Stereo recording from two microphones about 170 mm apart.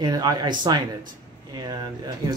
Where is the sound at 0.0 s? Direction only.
25° right (ahead or behind).